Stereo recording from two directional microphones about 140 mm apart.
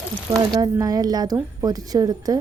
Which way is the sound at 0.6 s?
25° right (ahead or behind).